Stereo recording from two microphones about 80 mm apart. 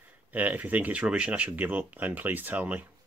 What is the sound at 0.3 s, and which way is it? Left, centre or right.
Speech, right.